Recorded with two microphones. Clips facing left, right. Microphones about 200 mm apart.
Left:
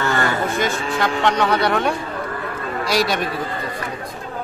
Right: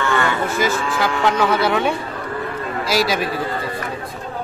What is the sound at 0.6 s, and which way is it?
A man's voice, 5° right (ahead or behind).